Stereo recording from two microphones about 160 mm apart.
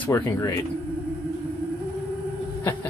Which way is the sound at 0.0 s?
15° left (ahead or behind).